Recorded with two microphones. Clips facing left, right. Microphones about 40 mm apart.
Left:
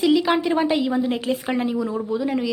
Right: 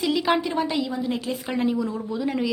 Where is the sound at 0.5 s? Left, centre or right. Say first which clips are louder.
Left 5 dB; left.